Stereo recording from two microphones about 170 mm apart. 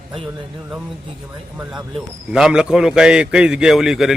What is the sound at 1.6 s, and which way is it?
A man's voice, 5° right (ahead or behind).